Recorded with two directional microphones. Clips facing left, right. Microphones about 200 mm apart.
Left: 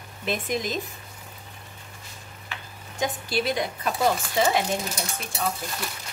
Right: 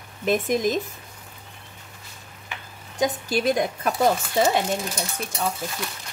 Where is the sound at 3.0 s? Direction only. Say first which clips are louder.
Right 4 dB; 45° right (ahead or behind).